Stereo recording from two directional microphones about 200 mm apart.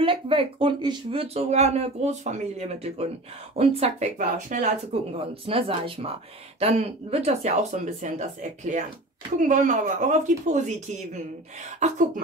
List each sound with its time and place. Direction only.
0.0 s speech: 25° right (ahead or behind)
5.5 s speech: 25° right (ahead or behind)